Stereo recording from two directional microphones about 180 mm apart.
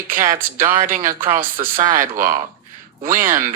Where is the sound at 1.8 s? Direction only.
45° right (ahead or behind).